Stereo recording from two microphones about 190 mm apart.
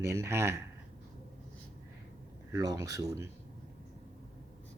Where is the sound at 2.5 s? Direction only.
15° right (ahead or behind).